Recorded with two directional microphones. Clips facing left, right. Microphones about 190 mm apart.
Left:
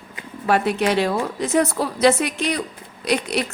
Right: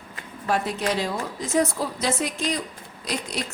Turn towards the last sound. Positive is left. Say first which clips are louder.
# left 8 dB
turn(degrees=70)  # may be behind; listen again after turning